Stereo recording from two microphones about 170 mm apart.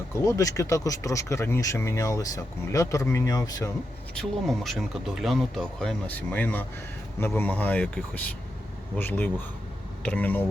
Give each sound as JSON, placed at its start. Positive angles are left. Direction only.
{"t": 0.1, "sound": "speech", "side_deg": 20}
{"t": 4.1, "sound": "speech", "side_deg": 0}